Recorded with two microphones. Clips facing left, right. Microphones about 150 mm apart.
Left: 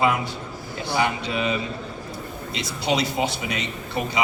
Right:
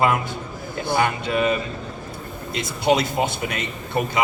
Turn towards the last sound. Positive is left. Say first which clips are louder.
# right 3 dB
turn(degrees=-50)  # may be behind; listen again after turning